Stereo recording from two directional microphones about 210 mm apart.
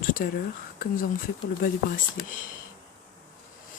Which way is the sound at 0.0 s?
40° left (ahead or behind).